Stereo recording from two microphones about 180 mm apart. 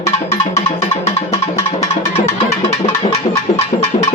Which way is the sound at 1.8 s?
35° left (ahead or behind).